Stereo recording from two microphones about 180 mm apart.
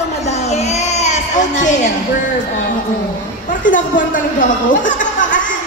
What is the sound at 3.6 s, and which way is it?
Speech, 45° left (ahead or behind).